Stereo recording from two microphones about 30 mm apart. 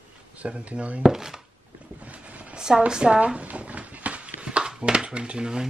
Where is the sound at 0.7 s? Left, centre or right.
Right.